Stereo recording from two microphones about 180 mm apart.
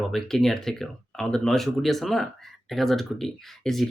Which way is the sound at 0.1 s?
Centre (ahead or behind).